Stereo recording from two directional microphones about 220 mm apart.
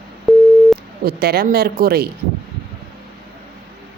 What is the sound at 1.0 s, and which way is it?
Speech, 45° right (ahead or behind).